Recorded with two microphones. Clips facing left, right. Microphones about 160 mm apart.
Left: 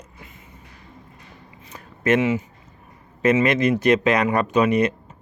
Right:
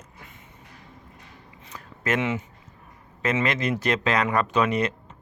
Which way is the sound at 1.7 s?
20° left (ahead or behind).